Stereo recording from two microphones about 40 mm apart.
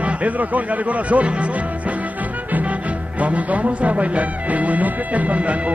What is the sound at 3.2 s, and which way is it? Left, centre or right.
Speech, right.